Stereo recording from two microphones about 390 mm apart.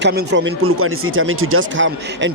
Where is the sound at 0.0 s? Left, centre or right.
Right.